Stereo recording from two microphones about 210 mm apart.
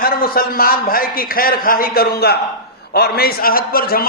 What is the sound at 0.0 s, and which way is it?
A man's voice, 45° left (ahead or behind).